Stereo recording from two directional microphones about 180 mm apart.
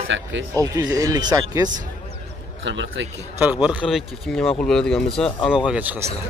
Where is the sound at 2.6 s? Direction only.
90° right.